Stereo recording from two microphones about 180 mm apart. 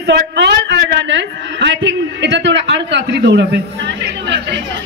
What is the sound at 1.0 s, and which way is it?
A man's voice, 80° right.